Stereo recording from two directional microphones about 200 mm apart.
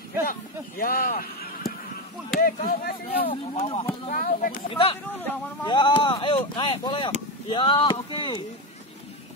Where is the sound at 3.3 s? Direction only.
25° left (ahead or behind).